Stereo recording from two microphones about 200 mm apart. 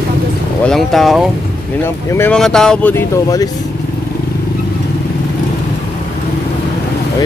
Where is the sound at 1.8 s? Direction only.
10° left (ahead or behind).